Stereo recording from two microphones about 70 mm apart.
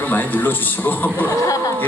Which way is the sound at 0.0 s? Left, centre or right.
Left.